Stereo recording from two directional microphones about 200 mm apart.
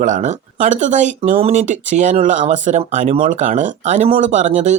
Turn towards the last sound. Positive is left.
turn(degrees=-35)  # may be behind; listen again after turning